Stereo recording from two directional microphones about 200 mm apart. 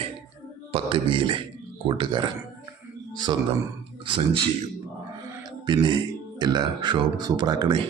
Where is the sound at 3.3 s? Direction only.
20° right (ahead or behind).